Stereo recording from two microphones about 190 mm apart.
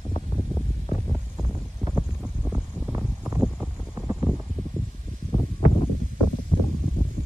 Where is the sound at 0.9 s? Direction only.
10° left (ahead or behind).